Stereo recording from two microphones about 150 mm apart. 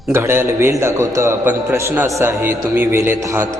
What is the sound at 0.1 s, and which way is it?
A man's voice, 15° right (ahead or behind).